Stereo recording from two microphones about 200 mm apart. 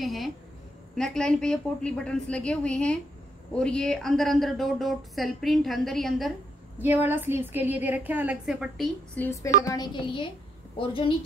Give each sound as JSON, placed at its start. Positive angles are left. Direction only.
{"t": 0.0, "sound": "speech", "side_deg": 0}
{"t": 6.8, "sound": "a woman's voice", "side_deg": -10}
{"t": 9.7, "sound": "a woman's voice", "side_deg": 20}